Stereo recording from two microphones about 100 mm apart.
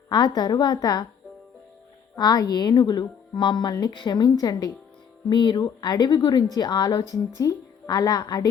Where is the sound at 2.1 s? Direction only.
40° left (ahead or behind).